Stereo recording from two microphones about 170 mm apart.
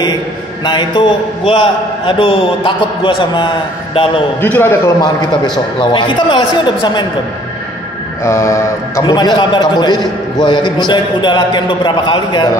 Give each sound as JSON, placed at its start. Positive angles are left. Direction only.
{"t": 0.7, "sound": "a man's voice", "side_deg": 25}
{"t": 4.4, "sound": "a man's voice", "side_deg": 10}
{"t": 5.8, "sound": "a man's voice", "side_deg": 30}
{"t": 8.2, "sound": "a man's voice", "side_deg": 15}